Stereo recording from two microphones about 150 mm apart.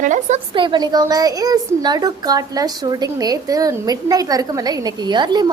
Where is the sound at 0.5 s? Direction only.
30° right (ahead or behind).